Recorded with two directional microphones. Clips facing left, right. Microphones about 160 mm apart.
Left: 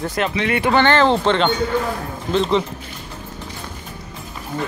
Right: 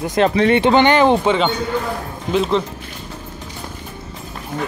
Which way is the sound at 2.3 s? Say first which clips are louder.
Right 1 dB; 5° right (ahead or behind).